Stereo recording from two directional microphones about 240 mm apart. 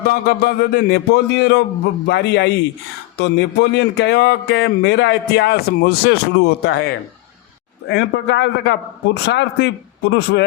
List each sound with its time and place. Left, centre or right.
0.0 s speech: left